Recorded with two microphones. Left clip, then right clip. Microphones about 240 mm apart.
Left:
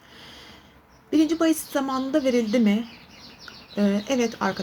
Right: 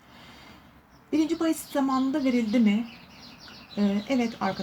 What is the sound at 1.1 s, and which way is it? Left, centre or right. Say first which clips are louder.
Speech: left 5 dB; centre.